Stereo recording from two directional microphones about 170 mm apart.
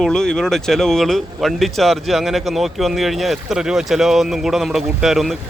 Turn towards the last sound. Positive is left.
turn(degrees=0)  # may be behind; listen again after turning